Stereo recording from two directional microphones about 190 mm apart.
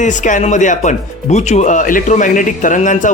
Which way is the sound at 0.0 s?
40° left (ahead or behind).